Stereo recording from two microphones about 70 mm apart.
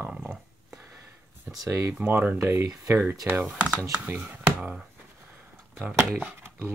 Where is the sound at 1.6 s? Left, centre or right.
Right.